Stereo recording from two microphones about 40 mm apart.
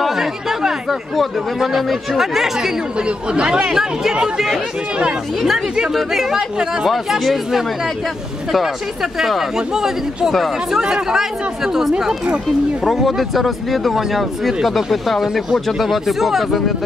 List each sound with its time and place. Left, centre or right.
0.0 s speech: centre
3.0 s speech: right
3.6 s speech: centre
5.9 s speech: centre
6.9 s speech: centre